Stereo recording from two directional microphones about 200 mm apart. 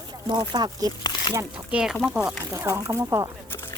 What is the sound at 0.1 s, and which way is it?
Speech, 20° right (ahead or behind).